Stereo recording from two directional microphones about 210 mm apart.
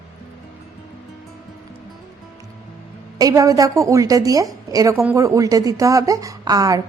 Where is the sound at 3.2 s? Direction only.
15° right (ahead or behind).